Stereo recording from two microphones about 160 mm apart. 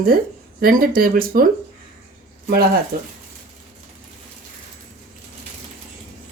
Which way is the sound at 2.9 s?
70° right (ahead or behind).